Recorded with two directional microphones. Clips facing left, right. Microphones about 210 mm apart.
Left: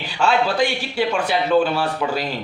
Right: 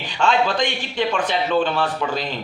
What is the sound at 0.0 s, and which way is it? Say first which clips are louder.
A man's voice: even; 10° left (ahead or behind).